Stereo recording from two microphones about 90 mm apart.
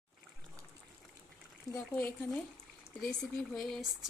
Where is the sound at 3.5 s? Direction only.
Centre (ahead or behind).